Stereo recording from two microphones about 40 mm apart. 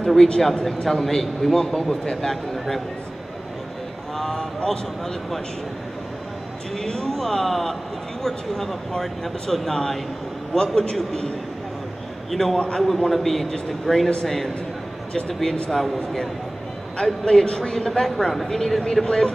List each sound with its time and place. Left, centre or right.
0.0 s a man's voice: centre
4.2 s a sound: centre
4.6 s a man's voice: centre
6.8 s a man's voice: centre
12.3 s a man's voice: centre
12.5 s a man's voice: centre
12.8 s a man's voice: centre
16.9 s a man's voice: centre
18.0 s a man's voice: centre
19.0 s a man's voice: left